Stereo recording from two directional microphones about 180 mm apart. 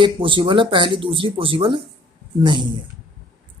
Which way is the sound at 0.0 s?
30° right (ahead or behind).